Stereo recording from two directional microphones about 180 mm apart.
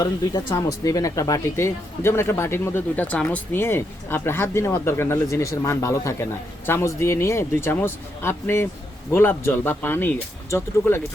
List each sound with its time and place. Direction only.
0.0 s speech: 20° left (ahead or behind)